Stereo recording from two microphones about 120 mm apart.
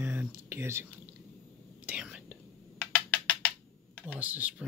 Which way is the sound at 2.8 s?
15° left (ahead or behind).